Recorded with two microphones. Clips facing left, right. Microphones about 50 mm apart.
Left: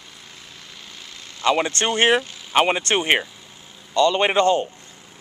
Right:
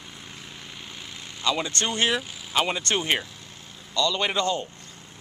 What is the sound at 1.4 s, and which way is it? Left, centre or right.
Speech, left.